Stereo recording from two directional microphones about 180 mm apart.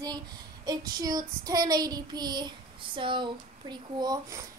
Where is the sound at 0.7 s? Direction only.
20° right (ahead or behind).